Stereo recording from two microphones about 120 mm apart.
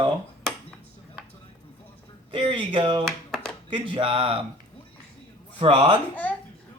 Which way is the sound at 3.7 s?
45° right (ahead or behind).